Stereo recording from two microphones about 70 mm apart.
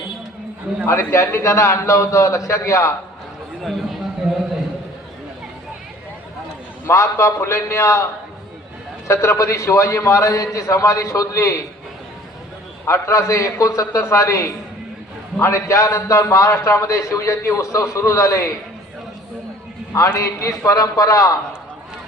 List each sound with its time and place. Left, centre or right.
0.9 s a man's voice: left
6.8 s a man's voice: left
9.0 s a man's voice: left
12.9 s a man's voice: left
19.9 s a man's voice: left